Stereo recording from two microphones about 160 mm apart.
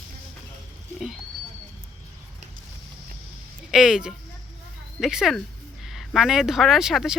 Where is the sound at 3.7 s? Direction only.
5° right (ahead or behind).